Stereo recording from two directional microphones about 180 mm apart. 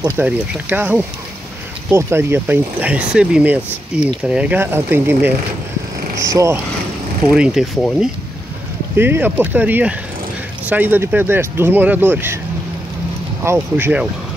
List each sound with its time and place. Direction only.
0.1 s speech: 10° right (ahead or behind)
7.3 s speech: 5° right (ahead or behind)
8.9 s speech: 10° right (ahead or behind)
13.4 s speech: 15° right (ahead or behind)